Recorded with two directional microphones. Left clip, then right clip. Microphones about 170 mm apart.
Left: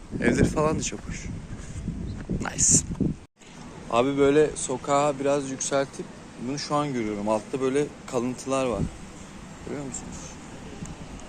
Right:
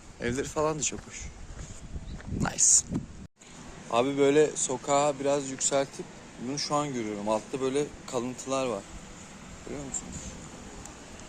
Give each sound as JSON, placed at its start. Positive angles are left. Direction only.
{"t": 0.2, "sound": "speech", "side_deg": -20}
{"t": 2.4, "sound": "speech", "side_deg": -20}
{"t": 3.8, "sound": "a man's voice", "side_deg": -10}